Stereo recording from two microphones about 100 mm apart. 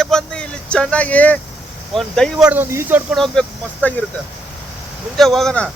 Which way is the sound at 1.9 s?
5° left (ahead or behind).